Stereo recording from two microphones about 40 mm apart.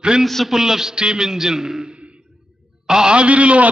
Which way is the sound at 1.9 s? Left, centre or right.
Right.